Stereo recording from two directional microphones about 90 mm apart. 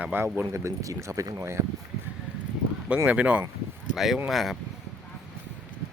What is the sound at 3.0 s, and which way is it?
Speech, 15° right (ahead or behind).